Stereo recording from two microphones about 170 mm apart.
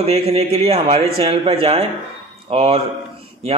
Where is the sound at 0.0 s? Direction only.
35° right (ahead or behind).